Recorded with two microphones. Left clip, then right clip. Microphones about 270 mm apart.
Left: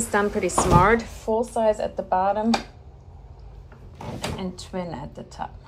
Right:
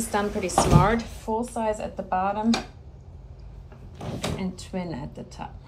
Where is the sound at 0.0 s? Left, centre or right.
Left.